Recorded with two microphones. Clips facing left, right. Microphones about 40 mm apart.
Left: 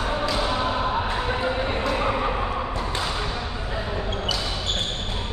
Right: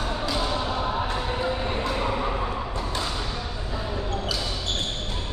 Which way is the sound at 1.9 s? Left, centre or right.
Left.